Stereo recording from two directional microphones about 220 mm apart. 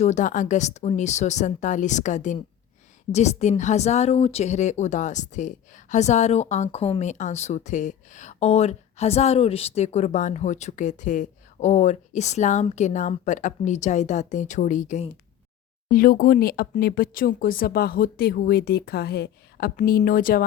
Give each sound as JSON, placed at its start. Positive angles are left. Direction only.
{"t": 0.0, "sound": "a woman's voice", "side_deg": 35}